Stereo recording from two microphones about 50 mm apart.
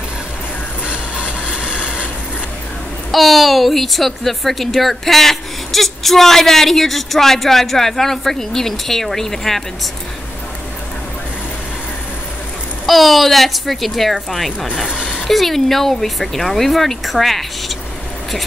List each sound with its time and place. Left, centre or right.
0.8 s train: right
3.1 s speech: centre
12.8 s speech: centre
14.9 s a sound: centre
15.2 s speech: centre